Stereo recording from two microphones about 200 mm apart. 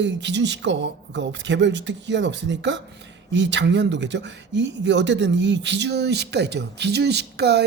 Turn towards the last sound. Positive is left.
turn(degrees=-55)  # may be behind; listen again after turning